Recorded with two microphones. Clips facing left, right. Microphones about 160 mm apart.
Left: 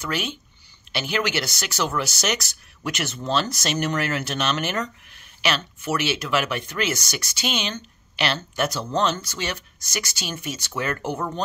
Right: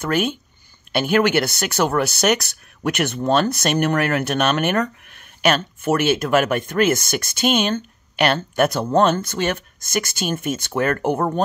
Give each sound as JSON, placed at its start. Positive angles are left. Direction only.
{"t": 0.0, "sound": "speech", "side_deg": -50}